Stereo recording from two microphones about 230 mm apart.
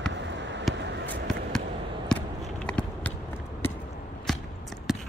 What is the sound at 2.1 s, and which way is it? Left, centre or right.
Basketball bounce, centre.